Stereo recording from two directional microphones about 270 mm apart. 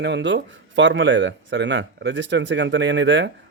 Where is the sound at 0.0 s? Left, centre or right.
Right.